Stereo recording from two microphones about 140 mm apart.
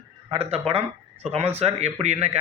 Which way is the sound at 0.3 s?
45° right (ahead or behind).